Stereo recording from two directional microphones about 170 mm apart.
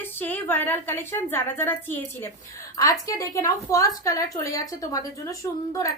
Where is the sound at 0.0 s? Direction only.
10° left (ahead or behind).